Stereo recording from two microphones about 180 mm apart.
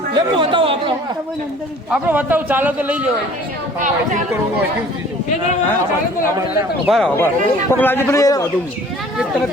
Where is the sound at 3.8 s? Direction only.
45° right (ahead or behind).